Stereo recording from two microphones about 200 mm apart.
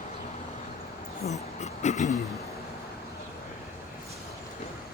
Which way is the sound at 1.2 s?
35° left (ahead or behind).